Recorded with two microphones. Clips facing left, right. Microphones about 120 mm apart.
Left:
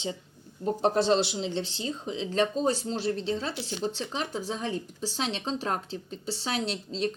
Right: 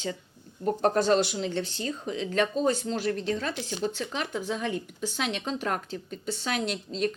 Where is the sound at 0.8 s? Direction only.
50° right (ahead or behind).